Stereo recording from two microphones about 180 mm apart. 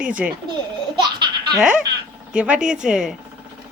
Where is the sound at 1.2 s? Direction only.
25° right (ahead or behind).